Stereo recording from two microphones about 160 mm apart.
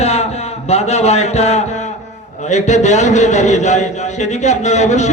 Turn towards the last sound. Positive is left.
turn(degrees=45)  # may be behind; listen again after turning